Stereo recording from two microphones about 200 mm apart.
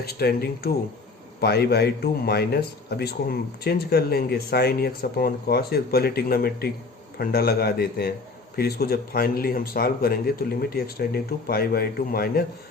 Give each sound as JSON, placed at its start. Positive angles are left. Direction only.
{"t": 0.0, "sound": "a man's voice", "side_deg": 50}